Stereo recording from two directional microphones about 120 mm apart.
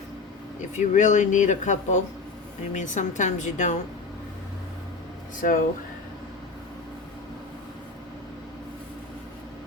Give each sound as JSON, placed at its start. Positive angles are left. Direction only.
{"t": 0.8, "sound": "speech", "side_deg": 85}
{"t": 5.4, "sound": "speech", "side_deg": 90}